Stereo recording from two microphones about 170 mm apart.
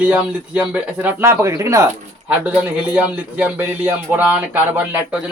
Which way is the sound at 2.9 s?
10° right (ahead or behind).